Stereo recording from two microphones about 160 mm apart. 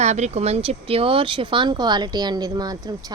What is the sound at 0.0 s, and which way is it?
Speech, 45° right (ahead or behind).